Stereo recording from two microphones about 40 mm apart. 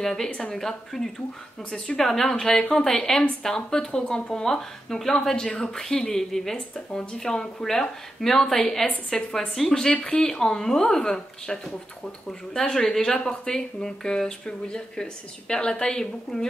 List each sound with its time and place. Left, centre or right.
0.0 s speech: centre
10.0 s speech: left
10.4 s speech: centre
16.3 s speech: centre